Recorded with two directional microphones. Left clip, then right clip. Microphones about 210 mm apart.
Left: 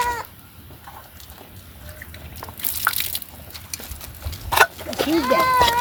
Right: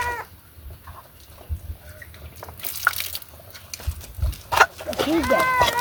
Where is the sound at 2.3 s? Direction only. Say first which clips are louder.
Left 3 dB; 10° right (ahead or behind).